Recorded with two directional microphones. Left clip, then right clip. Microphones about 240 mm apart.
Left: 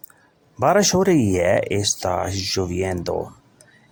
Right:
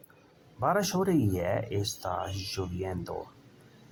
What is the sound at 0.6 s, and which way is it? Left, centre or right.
Speech, left.